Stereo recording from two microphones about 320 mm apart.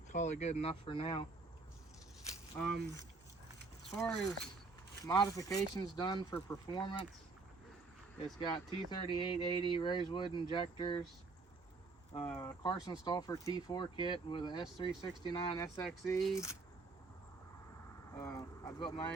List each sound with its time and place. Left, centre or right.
0.1 s speech: left
2.6 s speech: centre
8.4 s speech: centre
12.3 s speech: centre
18.1 s speech: centre